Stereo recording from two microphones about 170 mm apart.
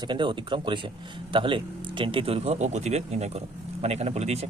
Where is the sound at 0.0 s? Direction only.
30° right (ahead or behind).